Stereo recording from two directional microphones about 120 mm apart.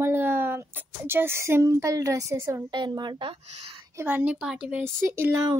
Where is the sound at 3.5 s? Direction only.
65° right (ahead or behind).